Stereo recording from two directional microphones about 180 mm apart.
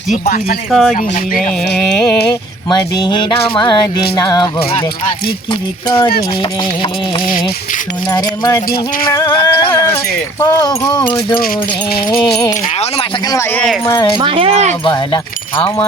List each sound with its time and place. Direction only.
0.1 s speech: 50° left (ahead or behind)
0.7 s music: centre (ahead or behind)
2.6 s speech: 20° left (ahead or behind)
7.3 s speech: 50° left (ahead or behind)
8.1 s speech: 20° left (ahead or behind)
13.8 s speech: 20° left (ahead or behind)
14.2 s speech: 30° right (ahead or behind)
14.8 s speech: 25° left (ahead or behind)